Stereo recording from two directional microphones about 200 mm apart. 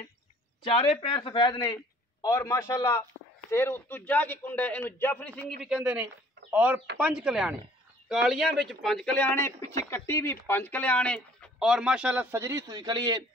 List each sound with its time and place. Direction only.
0.7 s a man's voice: 25° left (ahead or behind); by 5.5 s 10° left (ahead or behind)
5.6 s speech: 5° right (ahead or behind); by 13.2 s 20° right (ahead or behind)